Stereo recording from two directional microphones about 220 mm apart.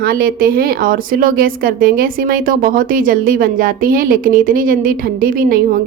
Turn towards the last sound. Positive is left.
turn(degrees=-40)  # may be behind; listen again after turning